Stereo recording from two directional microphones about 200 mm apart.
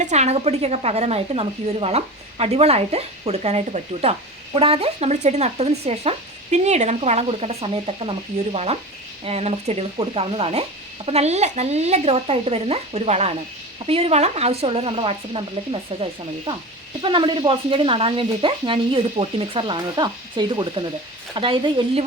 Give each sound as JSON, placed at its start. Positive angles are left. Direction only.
{"t": 0.0, "sound": "speech", "side_deg": -35}